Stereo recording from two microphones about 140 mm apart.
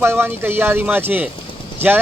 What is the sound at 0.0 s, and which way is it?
Speech, 15° right (ahead or behind).